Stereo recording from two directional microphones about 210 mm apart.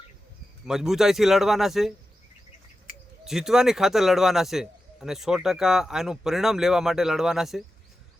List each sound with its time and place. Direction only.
0.6 s a man's voice: centre (ahead or behind)
3.2 s a man's voice: centre (ahead or behind)